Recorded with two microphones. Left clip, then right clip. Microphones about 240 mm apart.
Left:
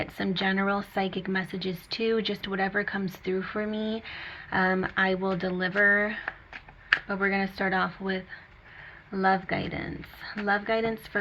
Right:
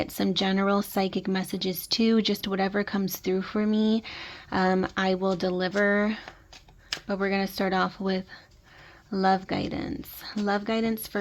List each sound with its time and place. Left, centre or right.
0.0 s speech: right